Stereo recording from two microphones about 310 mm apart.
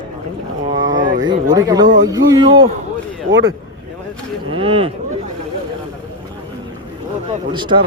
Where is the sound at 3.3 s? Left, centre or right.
Right.